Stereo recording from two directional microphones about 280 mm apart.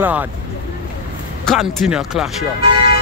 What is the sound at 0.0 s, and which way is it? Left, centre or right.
Speech, centre.